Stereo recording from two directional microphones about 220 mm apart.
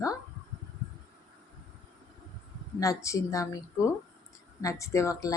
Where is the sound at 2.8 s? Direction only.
15° left (ahead or behind).